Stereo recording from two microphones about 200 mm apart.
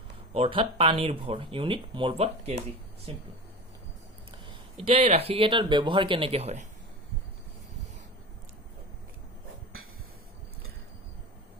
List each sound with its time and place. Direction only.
0.3 s speech: 25° right (ahead or behind)
4.8 s speech: 30° right (ahead or behind)